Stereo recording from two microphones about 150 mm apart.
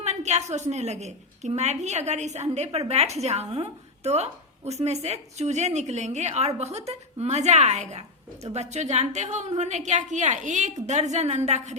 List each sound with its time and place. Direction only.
0.0 s a woman's voice: 50° right (ahead or behind)